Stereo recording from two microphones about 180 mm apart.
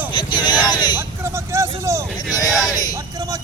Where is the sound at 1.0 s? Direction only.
15° right (ahead or behind).